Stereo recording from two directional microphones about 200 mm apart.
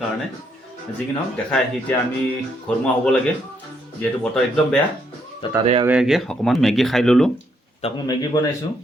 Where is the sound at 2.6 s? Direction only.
5° left (ahead or behind).